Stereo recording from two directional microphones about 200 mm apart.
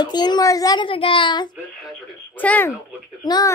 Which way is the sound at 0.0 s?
20° left (ahead or behind).